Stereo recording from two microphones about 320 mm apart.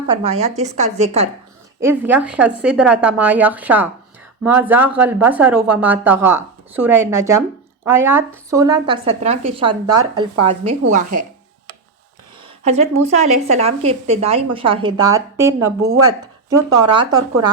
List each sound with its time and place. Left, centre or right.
0.1 s a woman's voice: centre
1.8 s a woman's voice: centre; by 11.3 s right
12.6 s a woman's voice: centre
16.9 s a woman's voice: centre